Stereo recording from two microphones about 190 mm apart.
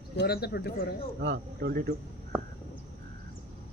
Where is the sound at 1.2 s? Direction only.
60° right (ahead or behind).